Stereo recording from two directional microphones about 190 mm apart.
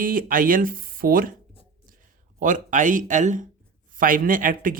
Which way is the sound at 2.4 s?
40° right (ahead or behind).